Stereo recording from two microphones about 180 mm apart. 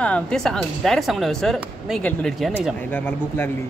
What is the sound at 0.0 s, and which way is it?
Speech, 5° left (ahead or behind).